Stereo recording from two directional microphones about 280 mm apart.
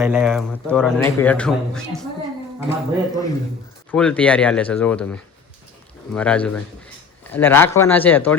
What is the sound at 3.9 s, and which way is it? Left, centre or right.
Speech, centre.